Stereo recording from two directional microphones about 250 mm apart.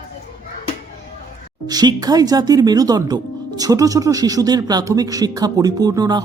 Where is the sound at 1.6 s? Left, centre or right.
Centre.